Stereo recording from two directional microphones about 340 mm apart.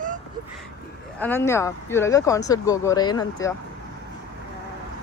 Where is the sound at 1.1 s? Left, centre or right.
Centre.